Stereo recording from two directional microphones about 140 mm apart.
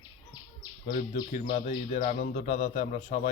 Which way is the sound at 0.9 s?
65° left (ahead or behind).